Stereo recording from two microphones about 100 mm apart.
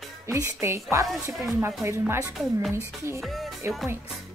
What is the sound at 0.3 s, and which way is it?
Speech, 25° right (ahead or behind).